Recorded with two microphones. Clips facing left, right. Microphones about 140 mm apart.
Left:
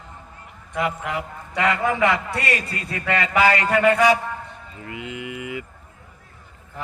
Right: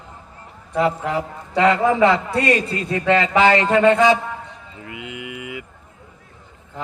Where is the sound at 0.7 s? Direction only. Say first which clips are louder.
Right 5 dB; 30° right (ahead or behind).